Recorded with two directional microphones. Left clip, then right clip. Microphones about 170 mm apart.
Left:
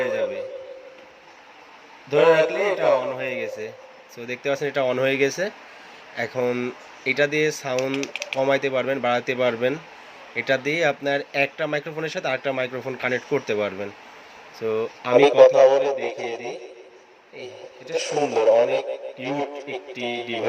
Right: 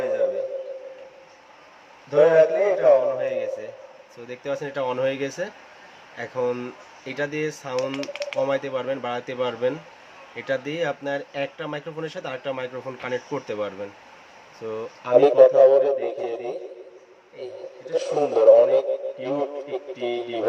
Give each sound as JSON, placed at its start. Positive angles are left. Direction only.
{"t": 2.0, "sound": "a man's voice", "side_deg": 20}
{"t": 15.4, "sound": "speech", "side_deg": -15}
{"t": 17.9, "sound": "speech", "side_deg": -20}
{"t": 20.2, "sound": "a man's voice", "side_deg": 20}